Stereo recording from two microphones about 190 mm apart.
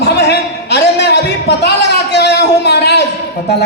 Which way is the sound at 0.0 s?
60° left (ahead or behind).